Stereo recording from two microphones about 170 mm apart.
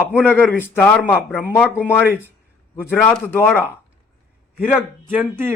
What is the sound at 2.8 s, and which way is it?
Speech, 10° left (ahead or behind).